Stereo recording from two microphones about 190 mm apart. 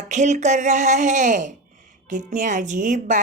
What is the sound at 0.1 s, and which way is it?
A woman's voice, 40° right (ahead or behind).